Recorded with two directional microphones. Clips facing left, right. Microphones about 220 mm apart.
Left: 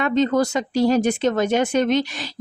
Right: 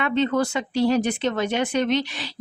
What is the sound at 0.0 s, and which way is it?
Speech, 40° left (ahead or behind).